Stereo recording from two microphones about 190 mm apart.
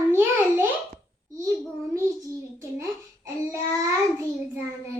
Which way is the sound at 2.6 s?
15° right (ahead or behind).